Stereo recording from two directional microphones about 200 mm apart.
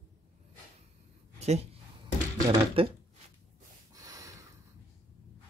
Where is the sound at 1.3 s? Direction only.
35° right (ahead or behind).